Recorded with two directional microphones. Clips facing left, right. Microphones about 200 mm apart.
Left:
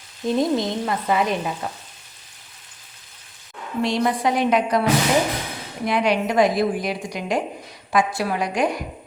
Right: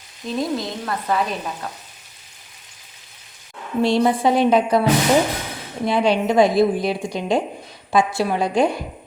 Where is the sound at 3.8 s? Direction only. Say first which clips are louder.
Right 4 dB; 30° right (ahead or behind).